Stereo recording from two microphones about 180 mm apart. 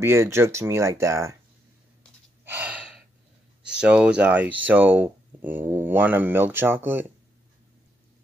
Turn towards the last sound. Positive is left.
turn(degrees=-10)  # may be behind; listen again after turning